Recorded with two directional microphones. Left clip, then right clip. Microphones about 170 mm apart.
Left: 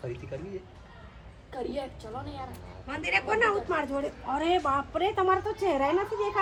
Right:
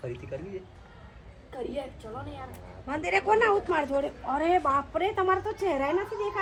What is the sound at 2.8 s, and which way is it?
Speech, 40° right (ahead or behind).